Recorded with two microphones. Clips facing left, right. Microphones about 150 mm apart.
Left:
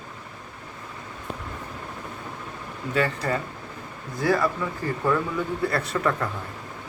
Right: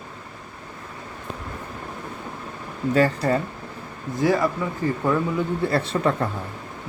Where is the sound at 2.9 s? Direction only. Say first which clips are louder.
Right 5 dB; 35° right (ahead or behind).